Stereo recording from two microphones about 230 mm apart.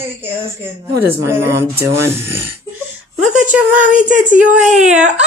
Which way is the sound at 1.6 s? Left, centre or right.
Centre.